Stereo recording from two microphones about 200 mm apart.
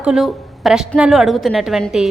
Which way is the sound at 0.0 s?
Centre (ahead or behind).